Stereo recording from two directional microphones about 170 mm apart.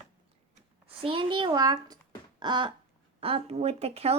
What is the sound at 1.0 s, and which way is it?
A woman's voice, 30° right (ahead or behind).